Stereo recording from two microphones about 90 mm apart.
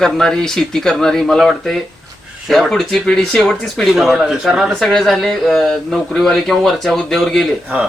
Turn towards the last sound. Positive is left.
turn(degrees=5)  # may be behind; listen again after turning